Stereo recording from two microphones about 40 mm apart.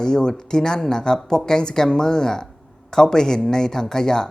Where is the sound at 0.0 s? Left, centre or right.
Centre.